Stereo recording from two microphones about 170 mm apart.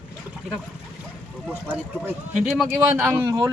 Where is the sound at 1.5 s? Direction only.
10° right (ahead or behind).